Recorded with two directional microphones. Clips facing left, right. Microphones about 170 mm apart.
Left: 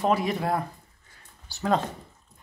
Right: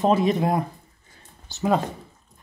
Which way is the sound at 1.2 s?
20° right (ahead or behind).